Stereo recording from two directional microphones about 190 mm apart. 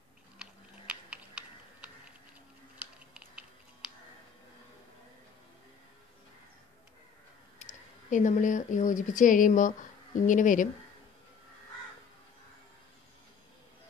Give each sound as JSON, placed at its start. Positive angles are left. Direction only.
{"t": 0.4, "sound": "typing", "side_deg": -5}
{"t": 2.8, "sound": "typing", "side_deg": -5}
{"t": 7.6, "sound": "a sound", "side_deg": 40}
{"t": 8.1, "sound": "speech", "side_deg": 40}